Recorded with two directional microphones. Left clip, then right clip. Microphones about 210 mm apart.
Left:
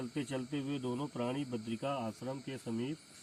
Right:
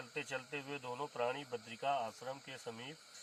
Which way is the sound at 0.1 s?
30° right (ahead or behind).